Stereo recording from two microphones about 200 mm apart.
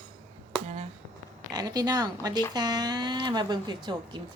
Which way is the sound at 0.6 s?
35° right (ahead or behind).